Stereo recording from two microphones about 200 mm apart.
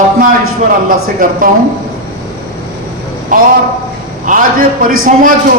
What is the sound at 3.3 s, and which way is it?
A man's voice, 40° right (ahead or behind).